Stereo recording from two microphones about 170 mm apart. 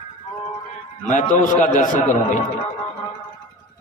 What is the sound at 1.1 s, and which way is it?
Speech, 50° left (ahead or behind).